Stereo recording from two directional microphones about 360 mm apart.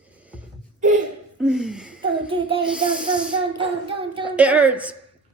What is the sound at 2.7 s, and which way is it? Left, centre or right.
Speech, centre.